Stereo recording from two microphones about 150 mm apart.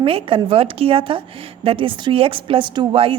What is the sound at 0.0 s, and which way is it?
A woman's voice, 35° right (ahead or behind).